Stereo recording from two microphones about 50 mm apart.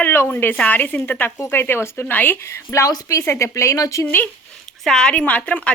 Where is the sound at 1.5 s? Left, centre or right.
Left.